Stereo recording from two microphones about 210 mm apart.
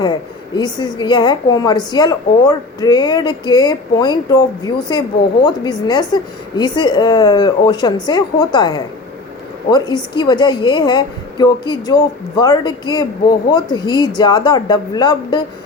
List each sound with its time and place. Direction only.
0.5 s a woman's voice: 20° left (ahead or behind)